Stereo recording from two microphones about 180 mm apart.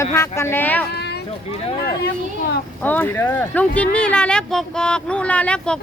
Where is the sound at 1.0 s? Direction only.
65° left (ahead or behind).